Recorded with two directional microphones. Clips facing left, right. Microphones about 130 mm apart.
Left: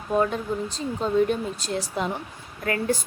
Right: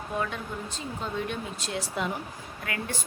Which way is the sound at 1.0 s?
40° left (ahead or behind).